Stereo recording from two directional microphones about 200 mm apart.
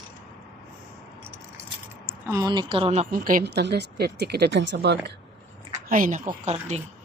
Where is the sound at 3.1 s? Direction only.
45° right (ahead or behind).